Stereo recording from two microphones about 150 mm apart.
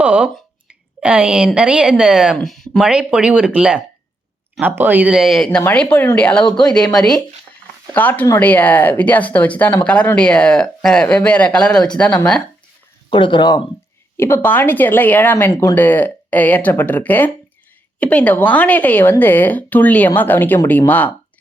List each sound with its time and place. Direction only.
0.0 s speech: 10° right (ahead or behind)
0.7 s a sound: 10° right (ahead or behind)
1.5 s speech: 5° right (ahead or behind)
13.1 s speech: 35° left (ahead or behind)
14.2 s speech: 15° left (ahead or behind)